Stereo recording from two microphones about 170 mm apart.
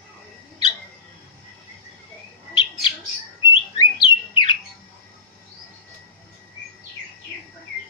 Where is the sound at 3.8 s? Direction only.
25° left (ahead or behind).